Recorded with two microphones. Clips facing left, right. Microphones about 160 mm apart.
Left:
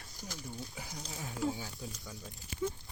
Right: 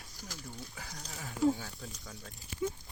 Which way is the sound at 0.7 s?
15° left (ahead or behind).